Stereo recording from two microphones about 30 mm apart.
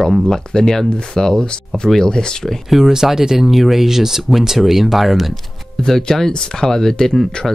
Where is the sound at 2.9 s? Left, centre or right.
Centre.